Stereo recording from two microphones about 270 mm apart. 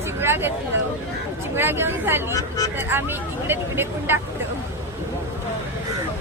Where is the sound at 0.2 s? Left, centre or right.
Centre.